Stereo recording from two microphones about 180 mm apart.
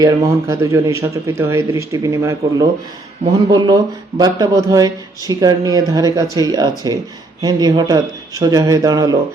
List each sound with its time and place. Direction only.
0.0 s speech: 20° right (ahead or behind)